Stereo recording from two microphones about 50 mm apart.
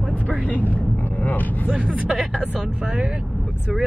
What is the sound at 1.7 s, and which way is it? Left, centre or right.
Speech, centre.